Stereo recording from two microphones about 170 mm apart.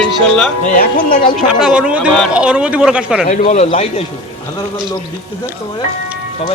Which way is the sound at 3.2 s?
45° left (ahead or behind).